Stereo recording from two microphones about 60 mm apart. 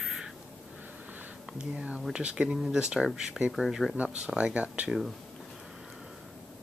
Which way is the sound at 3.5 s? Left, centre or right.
Centre.